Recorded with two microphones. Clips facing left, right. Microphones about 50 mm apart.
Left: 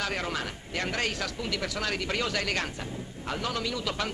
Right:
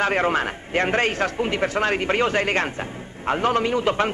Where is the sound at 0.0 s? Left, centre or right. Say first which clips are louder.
Right 11 dB; right.